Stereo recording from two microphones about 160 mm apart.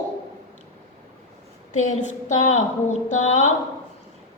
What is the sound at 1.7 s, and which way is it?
Speech, 45° left (ahead or behind).